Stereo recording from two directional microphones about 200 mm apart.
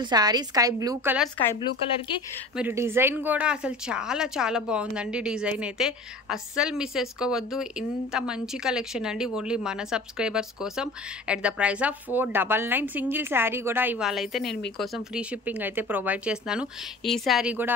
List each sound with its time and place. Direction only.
0.0 s a woman's voice: 20° right (ahead or behind)
2.5 s speech: 10° right (ahead or behind)